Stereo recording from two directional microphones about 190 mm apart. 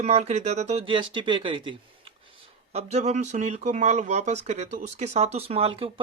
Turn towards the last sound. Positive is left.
turn(degrees=-30)  # may be behind; listen again after turning